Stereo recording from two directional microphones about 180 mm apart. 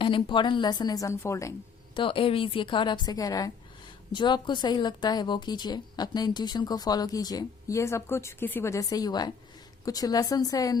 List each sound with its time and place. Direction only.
0.0 s speech: 25° left (ahead or behind)
2.0 s speech: 30° left (ahead or behind)